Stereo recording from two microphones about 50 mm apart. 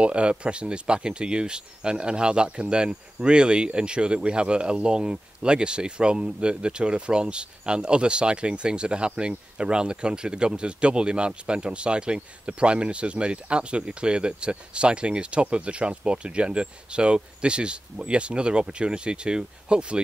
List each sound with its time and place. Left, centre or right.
0.0 s speech: right